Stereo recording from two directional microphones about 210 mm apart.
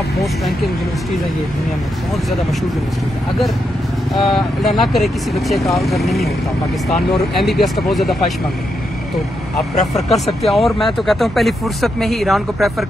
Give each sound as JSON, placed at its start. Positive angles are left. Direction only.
{"t": 4.1, "sound": "speech", "side_deg": 0}
{"t": 7.3, "sound": "speech", "side_deg": 0}
{"t": 9.8, "sound": "speech", "side_deg": 35}
{"t": 10.4, "sound": "speech", "side_deg": 0}